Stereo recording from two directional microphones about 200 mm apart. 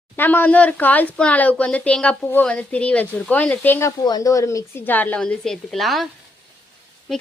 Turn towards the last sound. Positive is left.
turn(degrees=0)  # may be behind; listen again after turning